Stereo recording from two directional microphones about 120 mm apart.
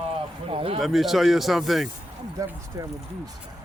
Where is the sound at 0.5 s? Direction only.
50° right (ahead or behind).